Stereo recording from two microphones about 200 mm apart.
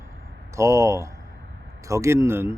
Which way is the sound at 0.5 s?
15° right (ahead or behind).